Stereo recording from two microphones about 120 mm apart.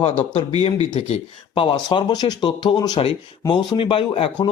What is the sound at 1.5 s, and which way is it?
Speech, 45° left (ahead or behind).